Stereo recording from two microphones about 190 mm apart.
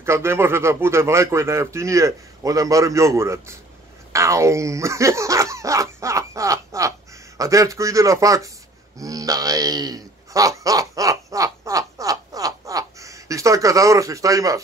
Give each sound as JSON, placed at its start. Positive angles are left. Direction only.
{"t": 0.0, "sound": "speech", "side_deg": -15}
{"t": 4.1, "sound": "dog", "side_deg": -15}
{"t": 7.3, "sound": "speech", "side_deg": -15}
{"t": 8.9, "sound": "a sound", "side_deg": -20}